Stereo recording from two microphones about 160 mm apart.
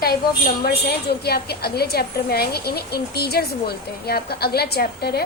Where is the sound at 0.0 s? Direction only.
70° left (ahead or behind).